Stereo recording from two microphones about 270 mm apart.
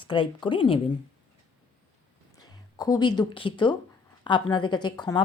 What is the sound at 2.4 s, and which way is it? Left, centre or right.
Speech, centre.